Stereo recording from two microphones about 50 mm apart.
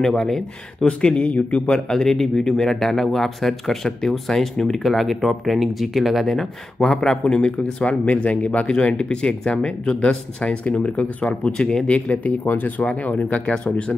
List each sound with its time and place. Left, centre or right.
0.0 s speech: centre; by 1.8 s left
1.9 s speech: centre
12.1 s speech: left